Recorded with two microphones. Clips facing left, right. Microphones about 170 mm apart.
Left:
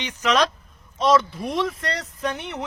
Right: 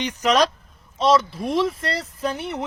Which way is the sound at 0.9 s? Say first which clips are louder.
Right 1 dB; centre (ahead or behind).